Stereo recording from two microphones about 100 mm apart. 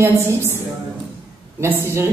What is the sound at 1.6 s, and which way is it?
Speech, 25° right (ahead or behind).